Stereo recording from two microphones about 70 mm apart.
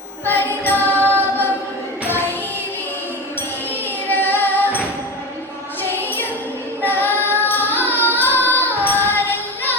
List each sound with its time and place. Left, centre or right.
0.6 s music: left
4.1 s female singing: left
6.0 s music: left
6.8 s female singing: left
7.3 s music: left
8.9 s female singing: left